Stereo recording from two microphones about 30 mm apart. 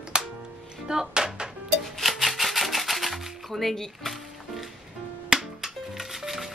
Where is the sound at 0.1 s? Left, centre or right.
Right.